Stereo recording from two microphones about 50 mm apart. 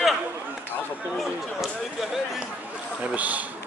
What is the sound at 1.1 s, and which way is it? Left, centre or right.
Speech, centre.